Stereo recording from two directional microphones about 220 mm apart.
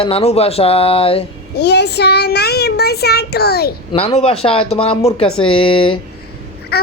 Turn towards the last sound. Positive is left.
turn(degrees=45)  # may be behind; listen again after turning